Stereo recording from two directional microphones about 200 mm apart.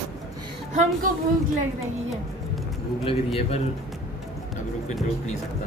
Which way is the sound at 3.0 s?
30° left (ahead or behind).